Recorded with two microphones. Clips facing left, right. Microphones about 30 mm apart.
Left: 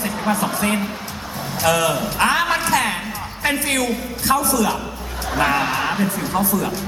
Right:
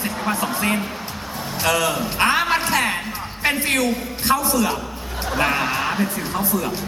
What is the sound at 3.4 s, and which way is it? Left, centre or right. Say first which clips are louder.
Speech: even; right.